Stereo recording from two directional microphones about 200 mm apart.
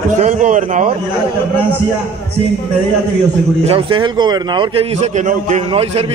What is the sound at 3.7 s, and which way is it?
A man's voice, 25° right (ahead or behind).